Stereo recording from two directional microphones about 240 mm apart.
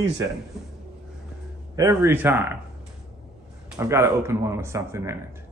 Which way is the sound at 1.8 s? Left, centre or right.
Centre.